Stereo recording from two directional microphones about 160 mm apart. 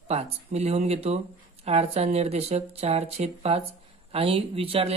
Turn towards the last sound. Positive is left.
turn(degrees=-35)  # may be behind; listen again after turning